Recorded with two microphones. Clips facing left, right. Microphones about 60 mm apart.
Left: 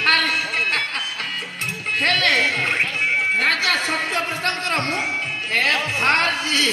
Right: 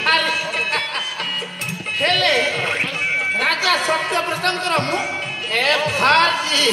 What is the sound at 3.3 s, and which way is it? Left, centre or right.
Music, left.